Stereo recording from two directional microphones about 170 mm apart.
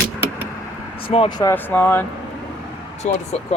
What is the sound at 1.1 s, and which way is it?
Speech, 30° left (ahead or behind).